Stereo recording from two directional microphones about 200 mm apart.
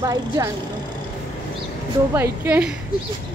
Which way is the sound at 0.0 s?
15° right (ahead or behind).